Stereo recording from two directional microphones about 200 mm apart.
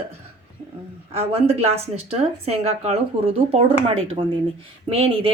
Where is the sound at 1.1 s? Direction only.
30° right (ahead or behind).